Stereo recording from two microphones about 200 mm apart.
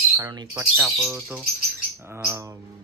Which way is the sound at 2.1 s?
10° right (ahead or behind).